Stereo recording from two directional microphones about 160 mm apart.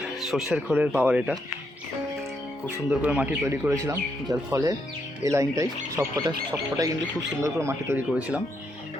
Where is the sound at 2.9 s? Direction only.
5° right (ahead or behind).